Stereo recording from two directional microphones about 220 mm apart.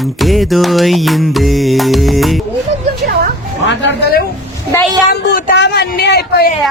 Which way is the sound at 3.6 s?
45° left (ahead or behind).